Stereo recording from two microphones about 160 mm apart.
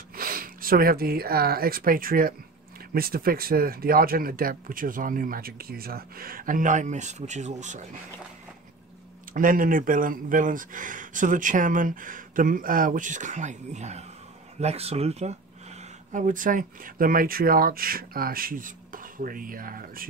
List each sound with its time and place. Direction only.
0.1 s speech: 60° right (ahead or behind)
9.3 s speech: 60° right (ahead or behind)